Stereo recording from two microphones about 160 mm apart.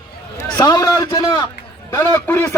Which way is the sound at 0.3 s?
20° left (ahead or behind).